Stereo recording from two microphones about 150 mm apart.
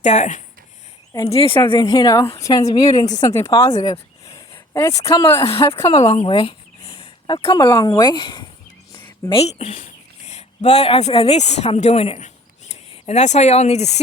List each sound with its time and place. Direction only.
0.0 s speech: 50° left (ahead or behind)
1.3 s a woman's voice: 40° left (ahead or behind); by 3.5 s 20° left (ahead or behind)
4.7 s a woman's voice: 20° left (ahead or behind)
5.4 s speech: 35° left (ahead or behind)
5.6 s a woman's voice: 20° left (ahead or behind)
6.1 s speech: 40° left (ahead or behind)
9.3 s speech: 40° left (ahead or behind)